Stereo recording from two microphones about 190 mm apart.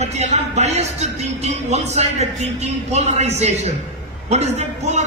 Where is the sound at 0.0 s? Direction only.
35° right (ahead or behind).